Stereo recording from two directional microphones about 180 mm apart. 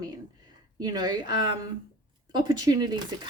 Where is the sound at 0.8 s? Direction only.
20° right (ahead or behind).